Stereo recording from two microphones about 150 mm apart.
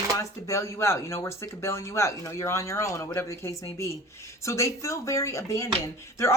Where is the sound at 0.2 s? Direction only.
20° left (ahead or behind).